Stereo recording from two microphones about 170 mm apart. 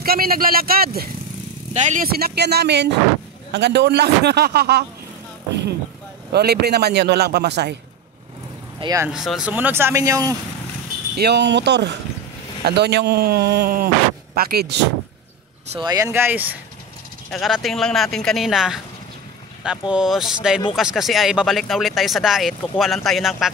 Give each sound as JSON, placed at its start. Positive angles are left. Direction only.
{"t": 0.0, "sound": "speech", "side_deg": -60}
{"t": 1.7, "sound": "speech", "side_deg": -45}
{"t": 2.0, "sound": "a man's voice", "side_deg": -65}
{"t": 6.3, "sound": "a man's voice", "side_deg": -70}
{"t": 8.7, "sound": "speech", "side_deg": -25}
{"t": 9.1, "sound": "speech", "side_deg": 0}
{"t": 11.1, "sound": "speech", "side_deg": -80}
{"t": 12.6, "sound": "a man's voice", "side_deg": -75}
{"t": 15.8, "sound": "speech", "side_deg": -20}
{"t": 17.3, "sound": "speech", "side_deg": 0}
{"t": 19.9, "sound": "speech", "side_deg": -5}